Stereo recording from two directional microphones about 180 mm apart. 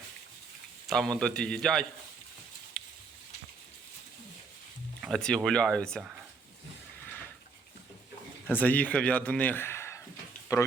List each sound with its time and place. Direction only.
0.9 s speech: 5° left (ahead or behind)
2.8 s a sound: 5° left (ahead or behind)
5.0 s speech: centre (ahead or behind)
8.4 s speech: 10° left (ahead or behind)